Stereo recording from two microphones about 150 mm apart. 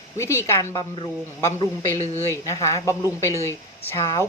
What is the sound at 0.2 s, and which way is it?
A woman's voice, 20° left (ahead or behind).